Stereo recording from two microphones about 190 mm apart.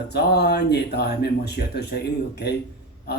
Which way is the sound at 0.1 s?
60° left (ahead or behind).